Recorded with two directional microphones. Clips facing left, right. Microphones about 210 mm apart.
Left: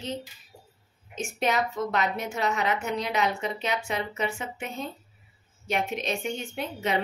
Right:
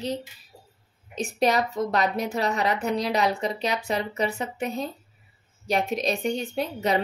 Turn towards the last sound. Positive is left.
turn(degrees=-35)  # may be behind; listen again after turning